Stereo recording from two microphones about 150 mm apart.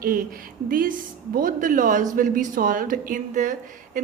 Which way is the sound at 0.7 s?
70° right (ahead or behind).